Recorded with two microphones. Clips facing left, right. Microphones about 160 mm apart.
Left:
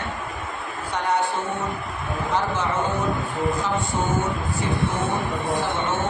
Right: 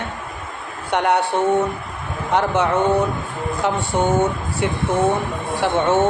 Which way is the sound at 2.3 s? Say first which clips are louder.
Right 7 dB; 70° right (ahead or behind).